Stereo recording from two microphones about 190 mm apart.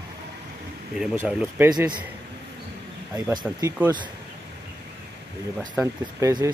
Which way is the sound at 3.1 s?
20° right (ahead or behind).